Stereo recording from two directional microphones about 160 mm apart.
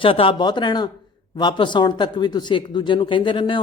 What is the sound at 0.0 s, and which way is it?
Speech, 35° left (ahead or behind).